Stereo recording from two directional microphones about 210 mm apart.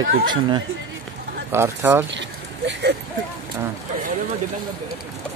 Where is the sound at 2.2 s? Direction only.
55° right (ahead or behind).